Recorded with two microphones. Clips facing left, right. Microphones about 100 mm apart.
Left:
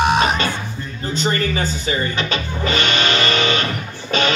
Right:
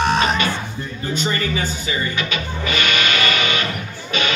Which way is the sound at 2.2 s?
35° left (ahead or behind).